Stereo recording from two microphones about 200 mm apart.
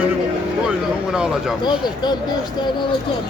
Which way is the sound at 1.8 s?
20° left (ahead or behind).